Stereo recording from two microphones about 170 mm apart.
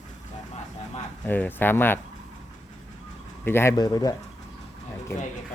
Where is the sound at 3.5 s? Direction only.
15° left (ahead or behind).